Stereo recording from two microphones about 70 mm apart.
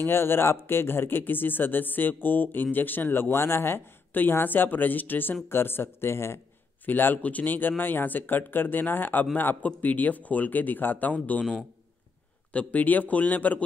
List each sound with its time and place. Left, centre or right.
0.0 s speech: left
6.9 s speech: left
12.5 s speech: left